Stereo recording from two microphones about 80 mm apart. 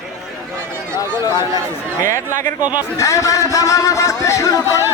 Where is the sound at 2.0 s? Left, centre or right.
Left.